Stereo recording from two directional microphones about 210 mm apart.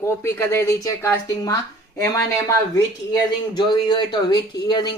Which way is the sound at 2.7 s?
20° left (ahead or behind).